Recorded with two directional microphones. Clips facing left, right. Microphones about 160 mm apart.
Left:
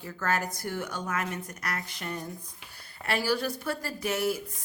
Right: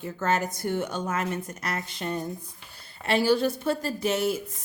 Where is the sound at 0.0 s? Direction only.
20° right (ahead or behind).